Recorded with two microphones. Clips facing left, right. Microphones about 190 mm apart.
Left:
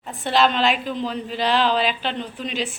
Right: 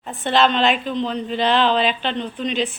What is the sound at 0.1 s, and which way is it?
A woman's voice, centre (ahead or behind).